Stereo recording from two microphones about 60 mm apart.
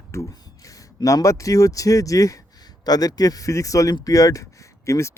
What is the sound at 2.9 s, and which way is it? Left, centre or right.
Speech, left.